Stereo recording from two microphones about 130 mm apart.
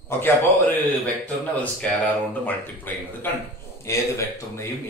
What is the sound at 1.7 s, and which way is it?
Speech, 10° left (ahead or behind).